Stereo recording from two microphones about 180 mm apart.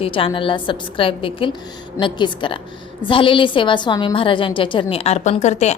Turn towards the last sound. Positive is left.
turn(degrees=40)  # may be behind; listen again after turning